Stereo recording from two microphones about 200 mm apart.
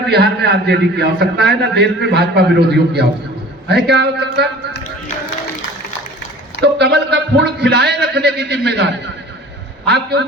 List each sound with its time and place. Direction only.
0.1 s a man's voice: 55° right (ahead or behind)
6.6 s a man's voice: 55° right (ahead or behind)